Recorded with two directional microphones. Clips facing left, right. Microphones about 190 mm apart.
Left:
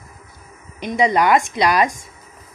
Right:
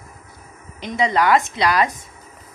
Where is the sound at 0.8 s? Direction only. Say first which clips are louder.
Left 2 dB; 15° left (ahead or behind).